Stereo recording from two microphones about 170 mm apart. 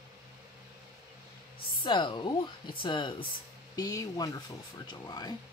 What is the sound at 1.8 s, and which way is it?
Speech, 30° left (ahead or behind).